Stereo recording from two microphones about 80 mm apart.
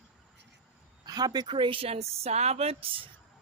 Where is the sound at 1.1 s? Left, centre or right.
Right.